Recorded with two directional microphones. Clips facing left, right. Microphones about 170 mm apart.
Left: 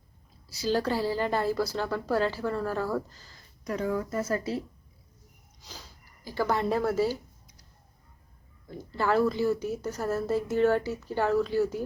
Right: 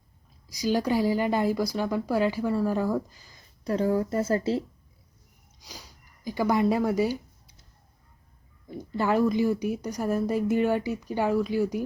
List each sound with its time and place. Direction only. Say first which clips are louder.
0.4 s a woman's voice: right 2 dB; 15° right (ahead or behind)
3.6 s a woman's voice: right 5 dB; 30° right (ahead or behind)
5.5 s speech: right 1 dB; 10° right (ahead or behind)
8.7 s a woman's voice: right 1 dB; 15° right (ahead or behind)